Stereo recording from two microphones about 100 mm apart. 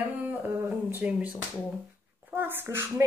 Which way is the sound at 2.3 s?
20° right (ahead or behind).